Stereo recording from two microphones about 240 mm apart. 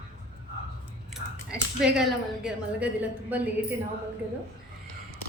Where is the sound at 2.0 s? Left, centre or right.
Centre.